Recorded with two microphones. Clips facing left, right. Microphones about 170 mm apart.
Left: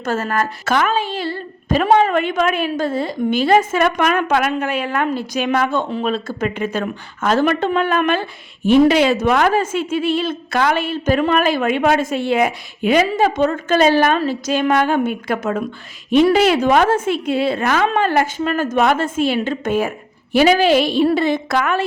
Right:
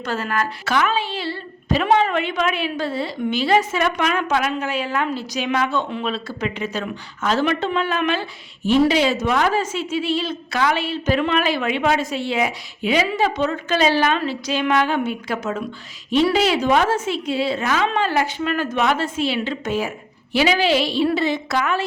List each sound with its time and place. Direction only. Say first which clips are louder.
0.0 s a woman's voice: left 4 dB; 45° left (ahead or behind)